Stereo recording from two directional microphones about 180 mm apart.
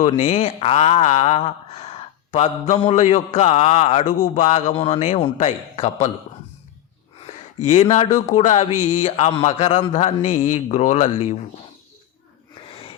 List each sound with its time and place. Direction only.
0.0 s speech: 35° left (ahead or behind)
7.7 s speech: 35° left (ahead or behind)